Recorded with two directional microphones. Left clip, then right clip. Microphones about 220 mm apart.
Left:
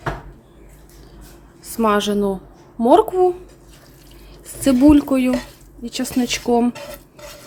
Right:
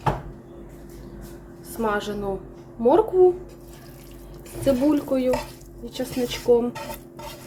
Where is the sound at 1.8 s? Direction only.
50° left (ahead or behind).